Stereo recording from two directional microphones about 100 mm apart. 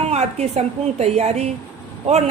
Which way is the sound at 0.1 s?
90° right.